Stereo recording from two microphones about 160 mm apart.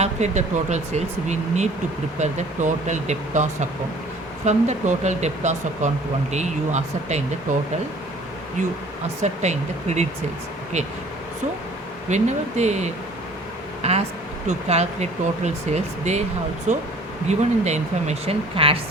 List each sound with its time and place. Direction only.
0.0 s speech: 45° right (ahead or behind)
9.2 s speech: 45° right (ahead or behind)
12.0 s speech: 45° right (ahead or behind)